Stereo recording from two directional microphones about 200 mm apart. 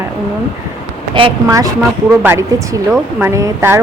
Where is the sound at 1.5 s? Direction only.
15° right (ahead or behind).